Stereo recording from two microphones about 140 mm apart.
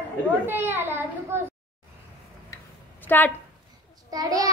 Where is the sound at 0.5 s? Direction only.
15° right (ahead or behind).